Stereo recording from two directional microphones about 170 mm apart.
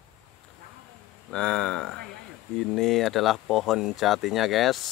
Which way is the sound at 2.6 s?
Centre (ahead or behind).